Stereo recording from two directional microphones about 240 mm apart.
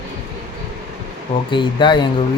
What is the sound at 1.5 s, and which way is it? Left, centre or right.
Speech, centre.